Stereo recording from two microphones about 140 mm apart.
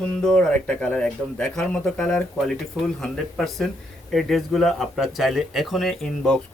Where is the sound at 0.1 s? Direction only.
5° left (ahead or behind).